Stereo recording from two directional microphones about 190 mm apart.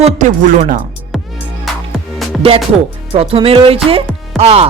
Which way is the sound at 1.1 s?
Centre (ahead or behind).